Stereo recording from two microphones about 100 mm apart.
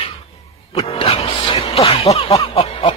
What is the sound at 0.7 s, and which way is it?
Speech, 75° left (ahead or behind).